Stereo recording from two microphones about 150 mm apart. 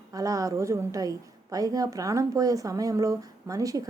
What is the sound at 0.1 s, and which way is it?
A woman's voice, 25° right (ahead or behind).